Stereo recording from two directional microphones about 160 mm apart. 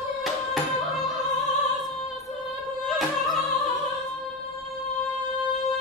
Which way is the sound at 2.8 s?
Centre (ahead or behind).